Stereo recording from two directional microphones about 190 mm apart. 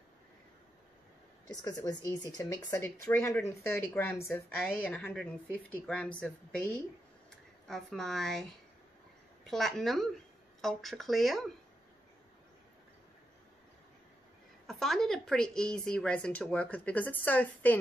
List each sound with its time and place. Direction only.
1.5 s a woman's voice: 20° left (ahead or behind)
7.6 s speech: centre (ahead or behind)
9.5 s speech: centre (ahead or behind)
14.7 s speech: centre (ahead or behind)